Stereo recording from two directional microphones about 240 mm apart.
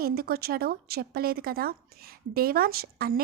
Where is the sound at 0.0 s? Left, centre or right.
Right.